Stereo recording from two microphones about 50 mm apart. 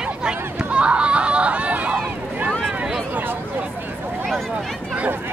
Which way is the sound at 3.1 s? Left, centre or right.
Right.